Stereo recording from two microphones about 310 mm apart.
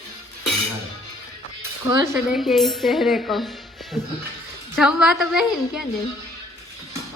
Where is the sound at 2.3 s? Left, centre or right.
Centre.